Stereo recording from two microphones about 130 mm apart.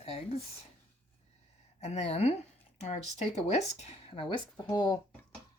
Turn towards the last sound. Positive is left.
turn(degrees=35)  # may be behind; listen again after turning